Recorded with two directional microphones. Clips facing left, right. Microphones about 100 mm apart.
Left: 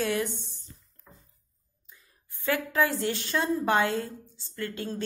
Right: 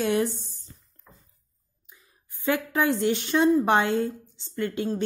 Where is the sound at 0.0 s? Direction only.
30° right (ahead or behind).